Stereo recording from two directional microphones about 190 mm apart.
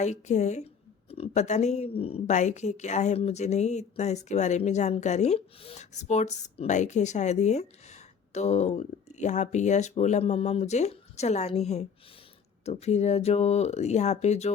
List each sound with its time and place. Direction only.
0.0 s a woman's voice: 40° left (ahead or behind)